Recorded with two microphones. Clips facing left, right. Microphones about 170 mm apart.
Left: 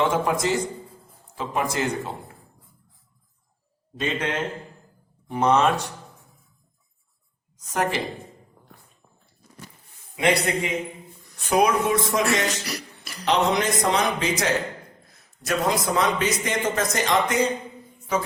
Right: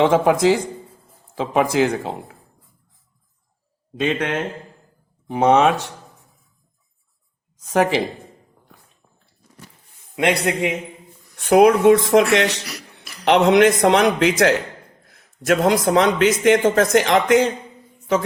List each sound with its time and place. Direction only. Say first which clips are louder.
0.0 s speech: right 7 dB; 90° right
4.0 s a man's voice: right 5 dB; 60° right (ahead or behind)
5.3 s speech: right 5 dB; 90° right
7.7 s speech: right 7 dB; 90° right
10.2 s speech: right 3 dB; 70° right (ahead or behind)
13.8 s speech: right 8 dB; 90° right